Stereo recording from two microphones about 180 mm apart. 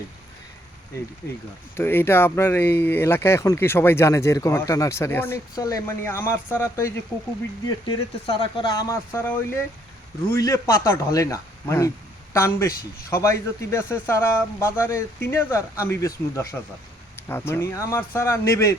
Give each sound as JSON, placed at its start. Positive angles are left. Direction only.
{"t": 1.7, "sound": "speech", "side_deg": 10}
{"t": 7.9, "sound": "speech", "side_deg": 30}
{"t": 10.3, "sound": "speech", "side_deg": 15}